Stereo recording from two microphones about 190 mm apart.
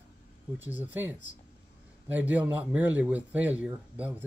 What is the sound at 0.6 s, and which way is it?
Speech, 10° right (ahead or behind).